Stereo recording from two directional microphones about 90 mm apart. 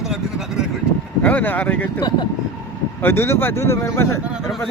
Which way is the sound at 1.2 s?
20° left (ahead or behind).